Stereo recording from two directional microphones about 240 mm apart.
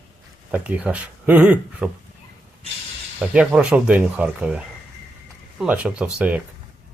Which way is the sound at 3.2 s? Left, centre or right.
Centre.